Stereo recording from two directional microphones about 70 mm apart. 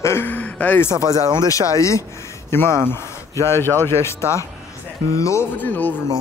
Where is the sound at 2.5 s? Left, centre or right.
Left.